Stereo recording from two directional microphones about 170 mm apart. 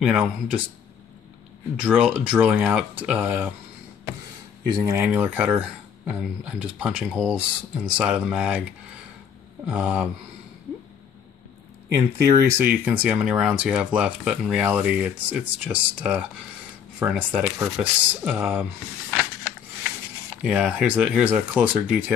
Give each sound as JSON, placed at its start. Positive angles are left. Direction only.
{"t": 0.0, "sound": "speech", "side_deg": -5}
{"t": 1.8, "sound": "speech", "side_deg": -5}
{"t": 4.6, "sound": "speech", "side_deg": -25}
{"t": 4.9, "sound": "speech", "side_deg": -10}
{"t": 9.7, "sound": "speech", "side_deg": -10}
{"t": 12.2, "sound": "speech", "side_deg": -15}
{"t": 20.4, "sound": "speech", "side_deg": -5}